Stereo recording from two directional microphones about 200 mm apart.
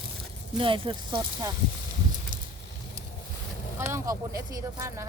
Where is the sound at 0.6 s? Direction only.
25° right (ahead or behind).